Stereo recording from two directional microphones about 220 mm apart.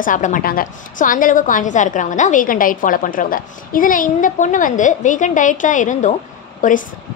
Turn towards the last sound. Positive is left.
turn(degrees=35)  # may be behind; listen again after turning